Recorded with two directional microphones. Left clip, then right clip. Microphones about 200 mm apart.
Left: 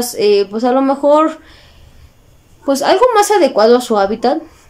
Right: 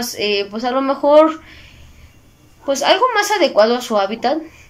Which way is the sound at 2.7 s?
25° left (ahead or behind).